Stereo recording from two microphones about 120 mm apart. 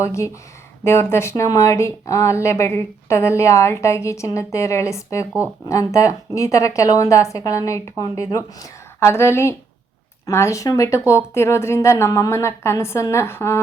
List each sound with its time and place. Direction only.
0.0 s speech: 25° left (ahead or behind)